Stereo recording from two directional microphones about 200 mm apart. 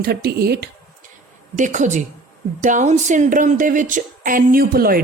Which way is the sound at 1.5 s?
40° right (ahead or behind).